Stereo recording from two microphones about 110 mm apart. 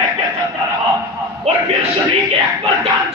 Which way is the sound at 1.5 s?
70° right (ahead or behind).